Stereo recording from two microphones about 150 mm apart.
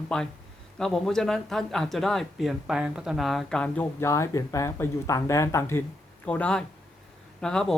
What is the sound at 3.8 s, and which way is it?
Speech, 20° left (ahead or behind).